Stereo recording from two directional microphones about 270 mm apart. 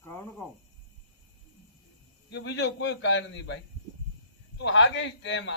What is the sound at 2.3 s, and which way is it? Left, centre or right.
Speech, left.